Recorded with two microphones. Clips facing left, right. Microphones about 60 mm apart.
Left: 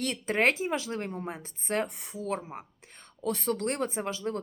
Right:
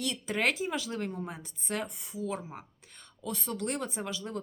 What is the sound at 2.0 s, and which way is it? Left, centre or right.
A woman's voice, left.